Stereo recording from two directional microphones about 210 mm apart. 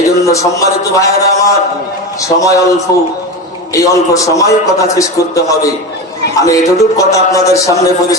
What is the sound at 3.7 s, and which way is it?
A man's voice, 15° left (ahead or behind).